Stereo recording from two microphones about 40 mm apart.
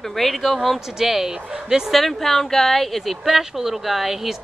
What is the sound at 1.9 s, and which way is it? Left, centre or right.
A woman's voice, centre.